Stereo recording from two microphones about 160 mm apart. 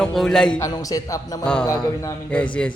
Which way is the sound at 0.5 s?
20° left (ahead or behind).